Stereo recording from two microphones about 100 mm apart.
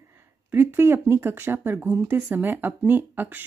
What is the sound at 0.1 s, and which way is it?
Speech, 20° right (ahead or behind).